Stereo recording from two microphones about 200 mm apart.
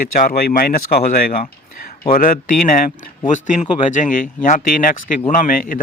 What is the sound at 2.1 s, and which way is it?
Speech, 45° left (ahead or behind).